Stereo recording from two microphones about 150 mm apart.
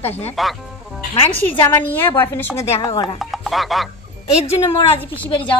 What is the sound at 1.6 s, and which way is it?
A woman's voice, 15° left (ahead or behind).